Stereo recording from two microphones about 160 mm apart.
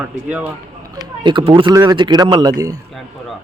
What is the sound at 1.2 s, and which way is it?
Speech, 30° right (ahead or behind).